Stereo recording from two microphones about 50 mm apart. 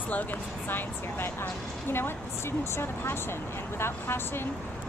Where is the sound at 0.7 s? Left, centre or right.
Left.